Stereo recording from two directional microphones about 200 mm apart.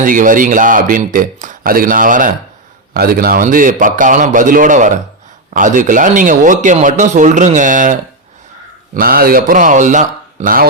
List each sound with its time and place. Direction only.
0.0 s a man's voice: 40° right (ahead or behind)
9.0 s speech: 45° right (ahead or behind)